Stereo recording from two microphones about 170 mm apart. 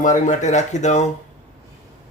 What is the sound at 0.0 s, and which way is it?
Speech, 45° left (ahead or behind).